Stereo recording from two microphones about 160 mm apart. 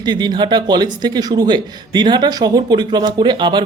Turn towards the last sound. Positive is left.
turn(degrees=-30)  # may be behind; listen again after turning